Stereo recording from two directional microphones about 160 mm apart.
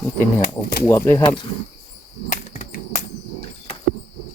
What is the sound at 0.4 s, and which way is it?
Speech, 75° left (ahead or behind).